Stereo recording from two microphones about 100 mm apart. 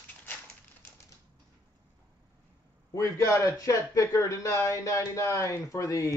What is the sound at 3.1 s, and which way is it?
Speech, 30° left (ahead or behind).